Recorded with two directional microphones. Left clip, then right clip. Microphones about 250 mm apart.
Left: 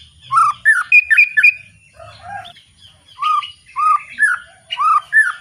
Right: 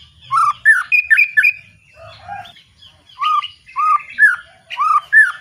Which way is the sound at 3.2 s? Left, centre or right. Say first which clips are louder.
Even; centre.